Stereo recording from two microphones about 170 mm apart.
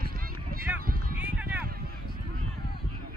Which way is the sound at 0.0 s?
65° right (ahead or behind).